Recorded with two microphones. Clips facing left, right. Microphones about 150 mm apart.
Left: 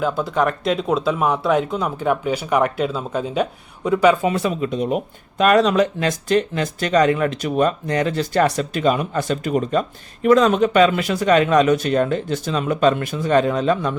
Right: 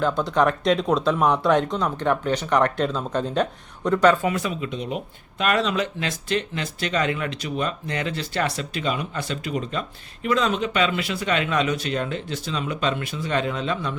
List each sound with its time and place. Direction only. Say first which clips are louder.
0.0 s speech: left 1 dB; 5° left (ahead or behind)
4.2 s speech: left 4 dB; 25° left (ahead or behind)
4.4 s speech: left 7 dB; 40° left (ahead or behind)